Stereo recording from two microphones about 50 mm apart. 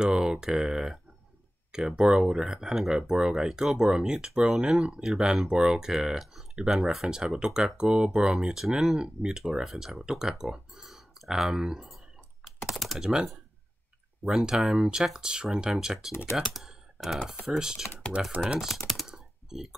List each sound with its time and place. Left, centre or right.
0.0 s speech: centre
7.1 s speech: centre
12.4 s computer keyboard: centre
13.0 s speech: centre
16.3 s computer keyboard: centre
17.5 s speech: centre
18.1 s speech: right
18.8 s speech: centre
19.0 s typing: centre